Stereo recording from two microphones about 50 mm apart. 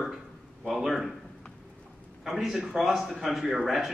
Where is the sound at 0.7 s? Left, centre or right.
Centre.